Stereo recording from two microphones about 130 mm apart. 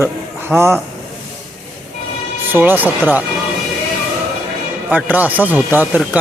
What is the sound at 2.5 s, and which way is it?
Speech, 15° right (ahead or behind).